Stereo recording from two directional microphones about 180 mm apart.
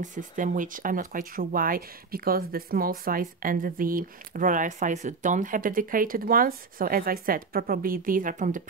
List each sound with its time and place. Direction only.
0.0 s speech: 45° right (ahead or behind)